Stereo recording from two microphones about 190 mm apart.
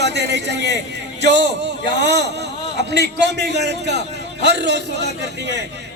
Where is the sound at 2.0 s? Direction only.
65° right (ahead or behind).